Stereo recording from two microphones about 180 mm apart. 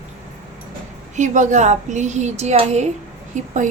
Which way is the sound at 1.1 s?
40° right (ahead or behind).